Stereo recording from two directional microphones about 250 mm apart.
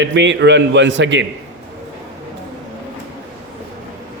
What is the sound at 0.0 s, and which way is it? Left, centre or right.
A man's voice, right.